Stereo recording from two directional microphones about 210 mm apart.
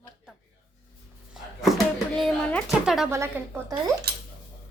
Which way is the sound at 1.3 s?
Centre (ahead or behind).